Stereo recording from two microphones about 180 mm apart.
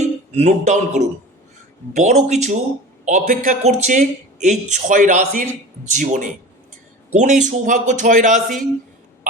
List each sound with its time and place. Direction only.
0.0 s a man's voice: 40° right (ahead or behind)